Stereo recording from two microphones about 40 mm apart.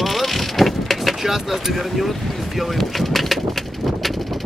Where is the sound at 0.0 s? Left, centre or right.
Centre.